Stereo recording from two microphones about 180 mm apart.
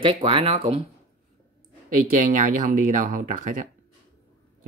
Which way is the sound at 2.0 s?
50° right (ahead or behind).